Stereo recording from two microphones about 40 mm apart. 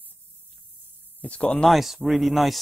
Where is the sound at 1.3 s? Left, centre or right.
Left.